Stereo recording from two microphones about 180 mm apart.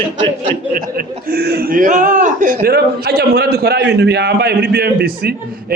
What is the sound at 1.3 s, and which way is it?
A man's voice, 60° right (ahead or behind).